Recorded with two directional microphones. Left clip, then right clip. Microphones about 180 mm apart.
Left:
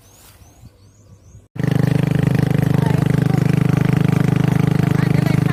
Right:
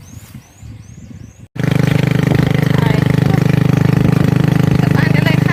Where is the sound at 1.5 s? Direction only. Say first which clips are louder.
Right 4 dB; 25° left (ahead or behind); by 4.7 s 5° left (ahead or behind).